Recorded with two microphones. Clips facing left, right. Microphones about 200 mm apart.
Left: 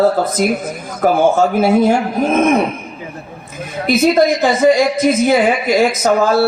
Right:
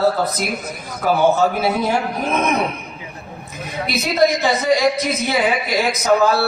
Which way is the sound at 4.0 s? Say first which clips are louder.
Left 5 dB; 50° left (ahead or behind).